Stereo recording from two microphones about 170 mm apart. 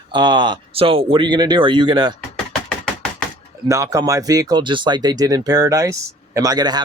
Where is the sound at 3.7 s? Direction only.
20° right (ahead or behind).